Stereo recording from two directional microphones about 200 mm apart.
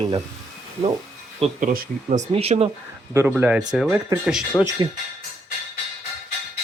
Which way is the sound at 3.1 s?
10° right (ahead or behind).